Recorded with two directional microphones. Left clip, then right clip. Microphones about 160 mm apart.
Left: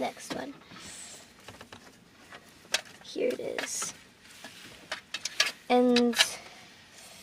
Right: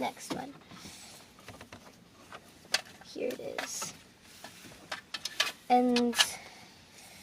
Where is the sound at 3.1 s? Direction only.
50° left (ahead or behind).